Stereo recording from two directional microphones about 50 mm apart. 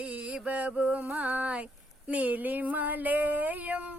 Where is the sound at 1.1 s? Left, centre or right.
Right.